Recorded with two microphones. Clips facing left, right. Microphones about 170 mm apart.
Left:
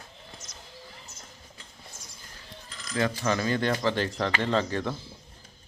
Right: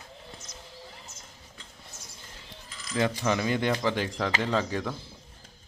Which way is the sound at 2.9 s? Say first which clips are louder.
Even; 20° right (ahead or behind).